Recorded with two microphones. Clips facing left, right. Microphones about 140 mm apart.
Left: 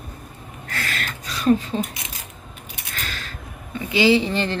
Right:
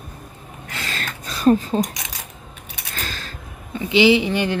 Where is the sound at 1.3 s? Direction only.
40° right (ahead or behind).